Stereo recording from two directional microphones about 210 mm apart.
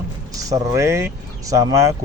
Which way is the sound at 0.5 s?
15° right (ahead or behind).